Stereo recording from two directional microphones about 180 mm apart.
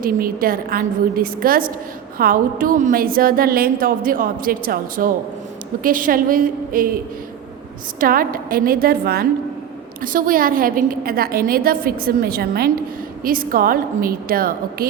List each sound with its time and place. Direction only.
0.0 s a woman's voice: 50° right (ahead or behind)
7.9 s a woman's voice: 50° right (ahead or behind)